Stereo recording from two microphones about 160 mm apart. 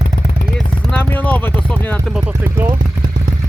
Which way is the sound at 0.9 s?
10° left (ahead or behind).